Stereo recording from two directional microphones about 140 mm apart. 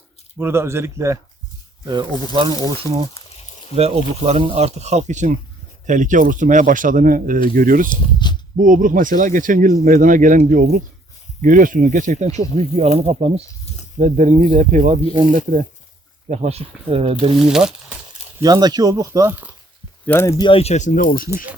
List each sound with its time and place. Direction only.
0.3 s speech: 15° right (ahead or behind)
1.9 s speech: 35° right (ahead or behind)
3.8 s speech: 50° right (ahead or behind); by 7.9 s 75° right (ahead or behind)
7.9 s speech: 30° left (ahead or behind)
8.5 s speech: 70° right (ahead or behind); by 13.4 s 50° right (ahead or behind)
14.0 s speech: 60° right (ahead or behind)
16.3 s speech: 50° right (ahead or behind)
17.3 s speech: 5° right (ahead or behind)
18.4 s speech: 30° right (ahead or behind); by 19.5 s 15° right (ahead or behind)
20.1 s speech: 20° left (ahead or behind)
20.4 s speech: 40° left (ahead or behind); by 21.2 s 85° left